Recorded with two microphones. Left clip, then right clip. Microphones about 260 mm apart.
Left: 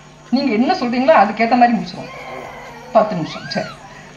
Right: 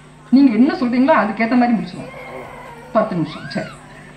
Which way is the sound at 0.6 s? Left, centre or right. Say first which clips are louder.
Left 2 dB; left.